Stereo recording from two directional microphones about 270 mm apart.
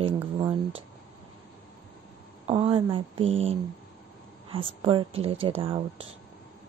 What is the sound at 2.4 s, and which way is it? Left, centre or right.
Speech, centre.